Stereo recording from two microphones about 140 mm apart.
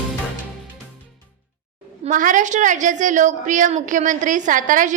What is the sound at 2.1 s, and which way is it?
A woman's voice, 65° right (ahead or behind).